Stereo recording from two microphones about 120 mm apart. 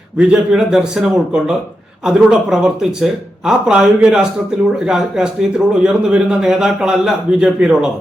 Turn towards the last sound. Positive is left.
turn(degrees=-5)  # may be behind; listen again after turning